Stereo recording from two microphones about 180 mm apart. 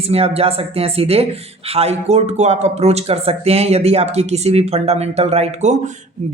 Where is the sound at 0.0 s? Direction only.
35° right (ahead or behind).